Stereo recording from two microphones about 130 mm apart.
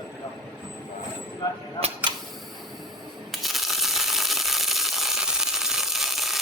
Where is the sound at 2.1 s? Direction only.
35° right (ahead or behind).